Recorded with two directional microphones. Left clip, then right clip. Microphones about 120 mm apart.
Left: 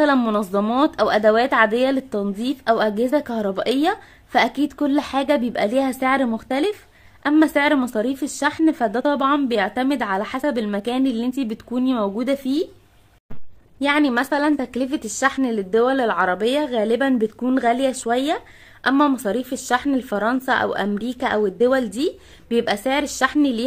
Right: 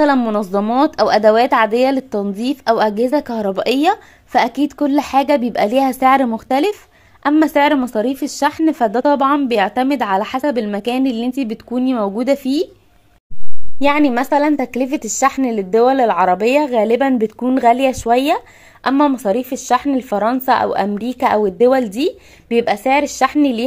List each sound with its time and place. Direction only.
0.5 s speech: 15° right (ahead or behind)
13.7 s a woman's voice: 35° right (ahead or behind)
18.9 s speech: 15° right (ahead or behind)